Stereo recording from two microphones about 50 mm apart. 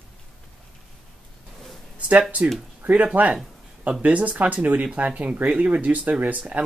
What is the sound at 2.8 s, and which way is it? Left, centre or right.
Speech, right.